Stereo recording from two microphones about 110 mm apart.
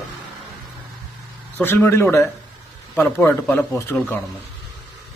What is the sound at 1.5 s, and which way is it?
Speech, 20° left (ahead or behind).